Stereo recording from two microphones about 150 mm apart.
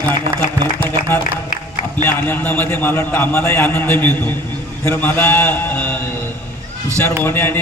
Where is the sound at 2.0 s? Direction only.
15° left (ahead or behind).